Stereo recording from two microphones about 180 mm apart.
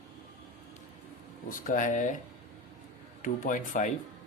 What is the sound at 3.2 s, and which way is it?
Speech, 45° left (ahead or behind).